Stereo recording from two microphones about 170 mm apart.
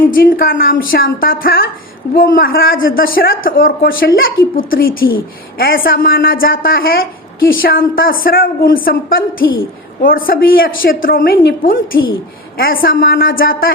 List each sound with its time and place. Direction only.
0.1 s a man's voice: 55° left (ahead or behind)
9.4 s a woman's voice: 90° left
10.0 s a man's voice: 55° left (ahead or behind)